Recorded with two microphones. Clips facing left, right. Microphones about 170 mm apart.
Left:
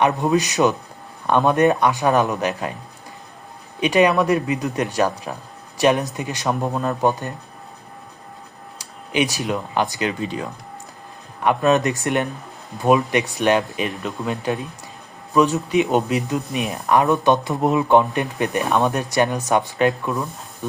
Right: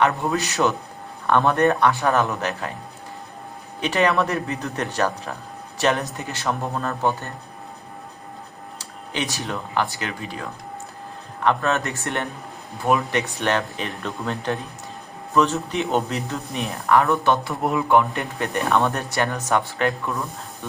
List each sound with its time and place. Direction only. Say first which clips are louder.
0.0 s speech: left 3 dB; 15° left (ahead or behind)
3.8 s speech: left 4 dB; 15° left (ahead or behind)
8.8 s speech: left 7 dB; 15° left (ahead or behind)